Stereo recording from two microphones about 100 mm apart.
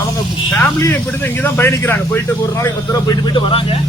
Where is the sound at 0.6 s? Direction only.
15° left (ahead or behind); by 3.8 s 60° left (ahead or behind).